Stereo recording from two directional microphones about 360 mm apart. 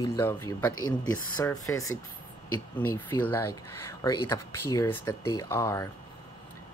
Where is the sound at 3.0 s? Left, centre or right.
Centre.